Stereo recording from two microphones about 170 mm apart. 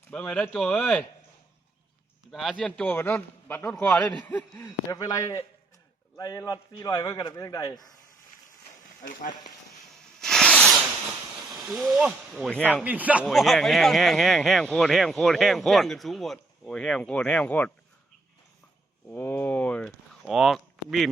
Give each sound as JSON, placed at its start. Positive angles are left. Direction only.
{"t": 0.1, "sound": "speech", "side_deg": 5}
{"t": 2.3, "sound": "a man's voice", "side_deg": 0}
{"t": 9.9, "sound": "a sound", "side_deg": 0}
{"t": 11.3, "sound": "speech", "side_deg": 0}
{"t": 12.6, "sound": "speech", "side_deg": -10}
{"t": 19.0, "sound": "speech", "side_deg": 10}